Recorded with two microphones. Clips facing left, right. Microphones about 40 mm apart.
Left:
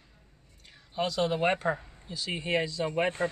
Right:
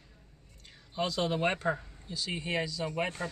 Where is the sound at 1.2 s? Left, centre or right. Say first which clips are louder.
Left 3 dB; centre.